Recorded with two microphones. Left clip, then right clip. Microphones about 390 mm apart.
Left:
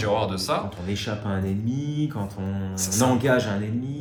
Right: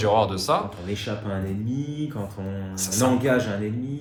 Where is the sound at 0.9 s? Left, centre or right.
Centre.